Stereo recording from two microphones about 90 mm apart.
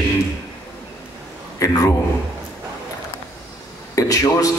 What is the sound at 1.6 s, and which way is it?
Speech, 35° left (ahead or behind).